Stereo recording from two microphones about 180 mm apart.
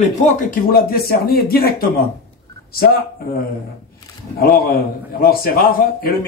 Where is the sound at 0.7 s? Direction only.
55° left (ahead or behind).